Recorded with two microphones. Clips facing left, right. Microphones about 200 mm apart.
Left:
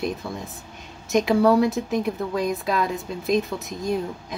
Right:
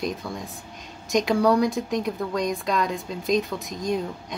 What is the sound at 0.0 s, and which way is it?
A woman's voice, centre (ahead or behind).